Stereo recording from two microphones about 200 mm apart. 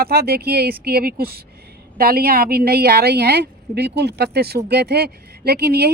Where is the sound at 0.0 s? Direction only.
50° right (ahead or behind).